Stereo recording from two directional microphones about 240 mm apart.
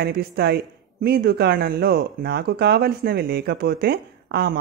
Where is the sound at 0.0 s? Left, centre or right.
Right.